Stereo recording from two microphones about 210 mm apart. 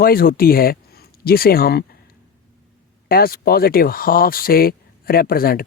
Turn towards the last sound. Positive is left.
turn(degrees=45)  # may be behind; listen again after turning